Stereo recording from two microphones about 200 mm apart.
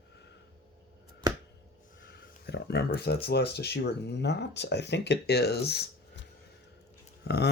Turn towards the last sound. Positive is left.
turn(degrees=55)  # may be behind; listen again after turning